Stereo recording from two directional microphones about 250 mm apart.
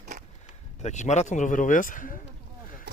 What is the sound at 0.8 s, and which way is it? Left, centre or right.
Speech, left.